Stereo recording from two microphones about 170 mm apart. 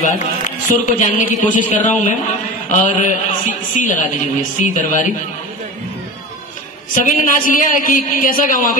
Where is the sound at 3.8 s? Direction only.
50° left (ahead or behind).